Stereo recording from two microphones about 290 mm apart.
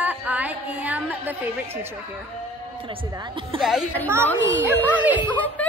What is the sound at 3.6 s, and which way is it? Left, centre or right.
Speech, centre.